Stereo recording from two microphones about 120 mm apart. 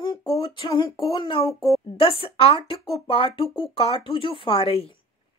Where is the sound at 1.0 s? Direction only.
45° left (ahead or behind).